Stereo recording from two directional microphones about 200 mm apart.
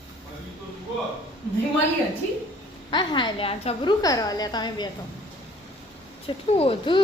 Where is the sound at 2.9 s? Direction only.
20° left (ahead or behind).